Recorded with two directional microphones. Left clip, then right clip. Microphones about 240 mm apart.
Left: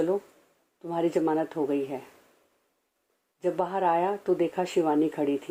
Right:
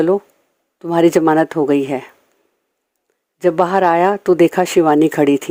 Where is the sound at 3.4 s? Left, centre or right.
Right.